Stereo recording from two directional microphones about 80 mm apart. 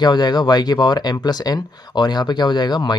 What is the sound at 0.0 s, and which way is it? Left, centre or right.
Speech, left.